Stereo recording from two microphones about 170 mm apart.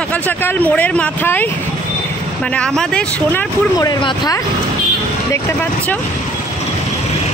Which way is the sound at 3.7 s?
25° left (ahead or behind).